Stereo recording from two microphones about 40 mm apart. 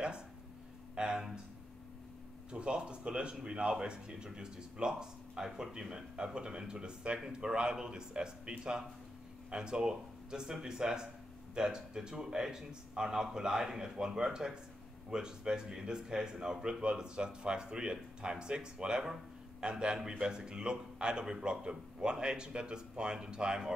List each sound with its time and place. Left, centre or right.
0.9 s speech: right
2.5 s a man's voice: right